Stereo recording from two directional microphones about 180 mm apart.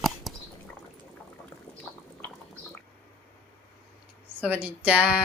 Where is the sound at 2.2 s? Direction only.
10° left (ahead or behind).